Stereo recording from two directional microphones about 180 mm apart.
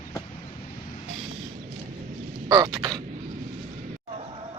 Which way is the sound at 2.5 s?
25° right (ahead or behind).